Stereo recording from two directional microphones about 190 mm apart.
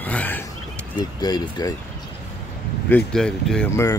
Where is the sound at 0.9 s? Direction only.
20° left (ahead or behind).